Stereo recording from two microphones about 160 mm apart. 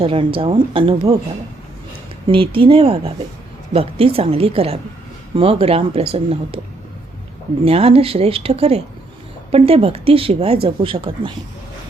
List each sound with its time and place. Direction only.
0.0 s speech: 35° right (ahead or behind)
2.2 s speech: 35° right (ahead or behind)
7.6 s speech: 35° right (ahead or behind)